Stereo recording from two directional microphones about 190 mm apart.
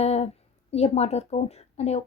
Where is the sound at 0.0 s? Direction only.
35° left (ahead or behind).